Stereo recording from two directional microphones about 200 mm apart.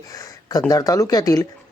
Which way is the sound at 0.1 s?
15° left (ahead or behind).